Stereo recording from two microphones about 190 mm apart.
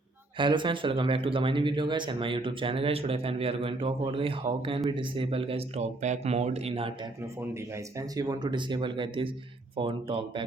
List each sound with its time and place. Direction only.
0.3 s speech: 25° right (ahead or behind)
7.5 s speech: 20° right (ahead or behind)